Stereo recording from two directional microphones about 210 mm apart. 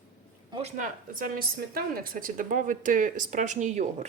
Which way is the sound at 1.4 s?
45° right (ahead or behind).